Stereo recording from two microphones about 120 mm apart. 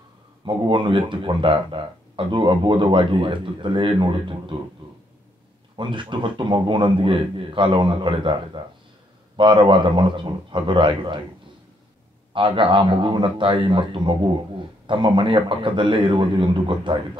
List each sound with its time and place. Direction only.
0.5 s speech: 40° right (ahead or behind)
5.8 s speech: 40° right (ahead or behind)
12.4 s speech: 45° right (ahead or behind)